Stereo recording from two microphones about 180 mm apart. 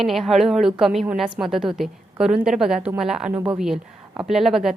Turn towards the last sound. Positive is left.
turn(degrees=0)  # may be behind; listen again after turning